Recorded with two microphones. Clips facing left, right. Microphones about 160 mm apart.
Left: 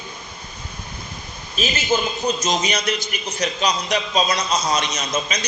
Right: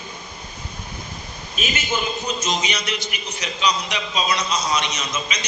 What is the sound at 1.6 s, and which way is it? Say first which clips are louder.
A man's voice: left 4 dB; 35° left (ahead or behind).